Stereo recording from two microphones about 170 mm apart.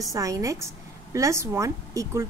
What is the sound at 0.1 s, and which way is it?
A woman's voice, 20° right (ahead or behind).